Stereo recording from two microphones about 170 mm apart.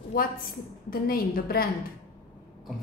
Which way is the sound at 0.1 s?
60° left (ahead or behind).